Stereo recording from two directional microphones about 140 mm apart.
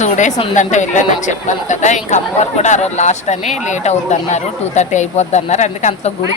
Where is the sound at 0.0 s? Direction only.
60° left (ahead or behind).